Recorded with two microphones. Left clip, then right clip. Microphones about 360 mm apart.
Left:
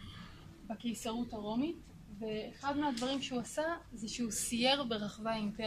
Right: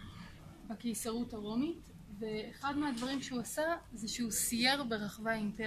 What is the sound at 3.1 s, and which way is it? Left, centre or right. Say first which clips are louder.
A woman's voice: left 2 dB; centre.